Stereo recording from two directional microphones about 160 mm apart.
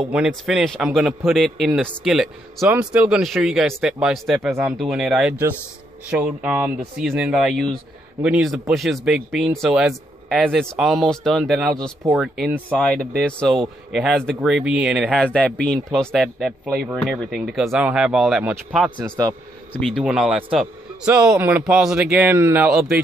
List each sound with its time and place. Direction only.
0.0 s speech: centre (ahead or behind)
12.7 s speech: 5° left (ahead or behind)
15.2 s speech: 10° left (ahead or behind)